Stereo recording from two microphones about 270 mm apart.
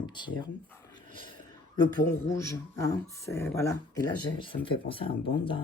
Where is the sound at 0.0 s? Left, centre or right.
Centre.